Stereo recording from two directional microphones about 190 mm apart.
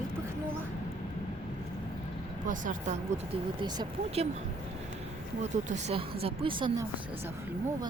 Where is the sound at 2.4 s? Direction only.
40° right (ahead or behind).